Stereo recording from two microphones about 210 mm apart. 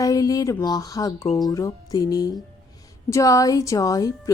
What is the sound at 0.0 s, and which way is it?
Speech, 15° left (ahead or behind).